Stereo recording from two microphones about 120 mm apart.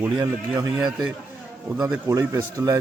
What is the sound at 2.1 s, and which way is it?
Speech, 25° right (ahead or behind).